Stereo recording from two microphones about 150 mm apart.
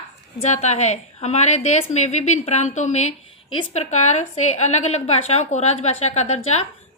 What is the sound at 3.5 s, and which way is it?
Speech, 35° left (ahead or behind).